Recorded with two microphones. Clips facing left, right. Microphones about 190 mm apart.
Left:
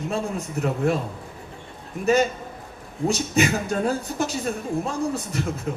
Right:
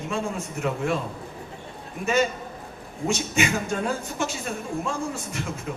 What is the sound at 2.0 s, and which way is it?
Speech, 35° left (ahead or behind).